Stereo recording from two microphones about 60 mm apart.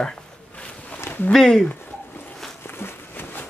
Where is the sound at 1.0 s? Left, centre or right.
Left.